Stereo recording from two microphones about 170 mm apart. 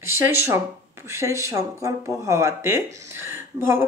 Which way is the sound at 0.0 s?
15° right (ahead or behind).